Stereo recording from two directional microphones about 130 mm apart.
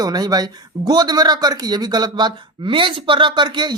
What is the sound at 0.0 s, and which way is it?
Speech, 30° right (ahead or behind).